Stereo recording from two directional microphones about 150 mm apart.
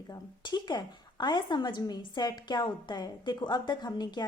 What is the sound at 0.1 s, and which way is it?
A woman's voice, 30° left (ahead or behind).